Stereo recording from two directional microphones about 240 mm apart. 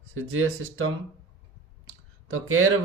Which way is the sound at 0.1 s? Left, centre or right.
Right.